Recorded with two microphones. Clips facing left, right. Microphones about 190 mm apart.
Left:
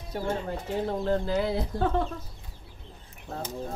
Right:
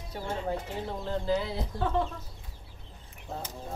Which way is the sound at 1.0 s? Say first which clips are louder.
Left 1 dB; 60° left (ahead or behind).